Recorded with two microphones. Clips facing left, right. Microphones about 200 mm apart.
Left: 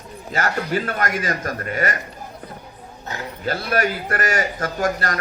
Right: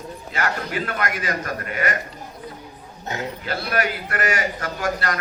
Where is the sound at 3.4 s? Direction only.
40° left (ahead or behind).